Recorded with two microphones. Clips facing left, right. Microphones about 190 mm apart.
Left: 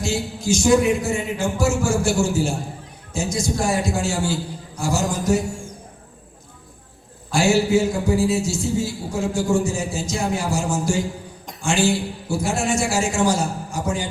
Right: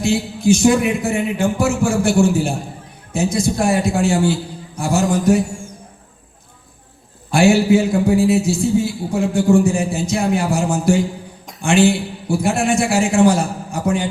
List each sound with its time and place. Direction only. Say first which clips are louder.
0.0 s a man's voice: right 7 dB; 60° right (ahead or behind)
7.3 s a man's voice: right 5 dB; 60° right (ahead or behind)